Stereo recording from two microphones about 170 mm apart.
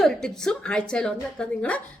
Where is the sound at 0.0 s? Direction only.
5° left (ahead or behind).